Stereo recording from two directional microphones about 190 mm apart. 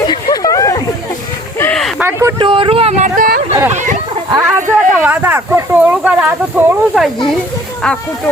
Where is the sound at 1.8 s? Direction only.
10° right (ahead or behind).